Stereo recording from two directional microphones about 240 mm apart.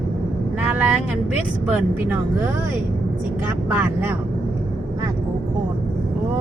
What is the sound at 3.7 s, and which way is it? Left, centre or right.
Speech, centre.